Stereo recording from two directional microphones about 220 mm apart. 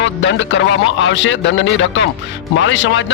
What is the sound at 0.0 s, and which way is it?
A man's voice, 55° left (ahead or behind).